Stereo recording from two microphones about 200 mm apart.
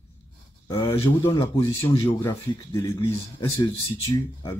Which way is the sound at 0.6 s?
15° left (ahead or behind).